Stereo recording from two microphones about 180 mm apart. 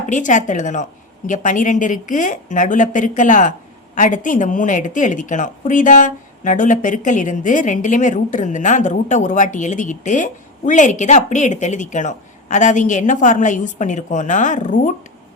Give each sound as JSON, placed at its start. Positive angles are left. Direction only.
{"t": 0.1, "sound": "a woman's voice", "side_deg": 45}